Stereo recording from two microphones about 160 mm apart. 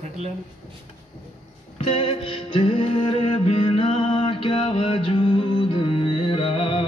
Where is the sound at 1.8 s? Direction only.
35° left (ahead or behind).